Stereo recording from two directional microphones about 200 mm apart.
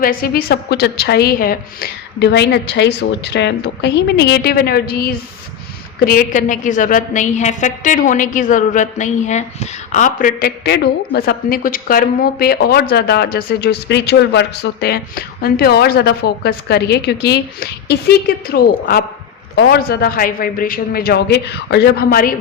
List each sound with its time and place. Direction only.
0.0 s a woman's voice: 45° left (ahead or behind)
6.1 s a woman's voice: 45° left (ahead or behind)